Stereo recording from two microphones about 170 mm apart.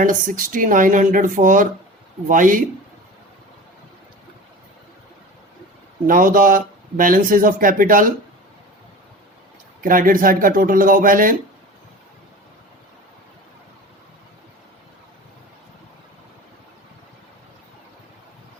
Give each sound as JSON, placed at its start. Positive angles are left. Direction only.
{"t": 0.0, "sound": "speech", "side_deg": -50}
{"t": 6.1, "sound": "speech", "side_deg": -55}
{"t": 9.8, "sound": "speech", "side_deg": -55}